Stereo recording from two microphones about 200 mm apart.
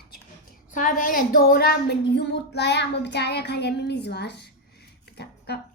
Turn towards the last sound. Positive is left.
turn(degrees=55)  # may be behind; listen again after turning